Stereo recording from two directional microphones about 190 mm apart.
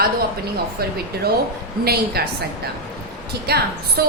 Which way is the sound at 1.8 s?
55° right (ahead or behind).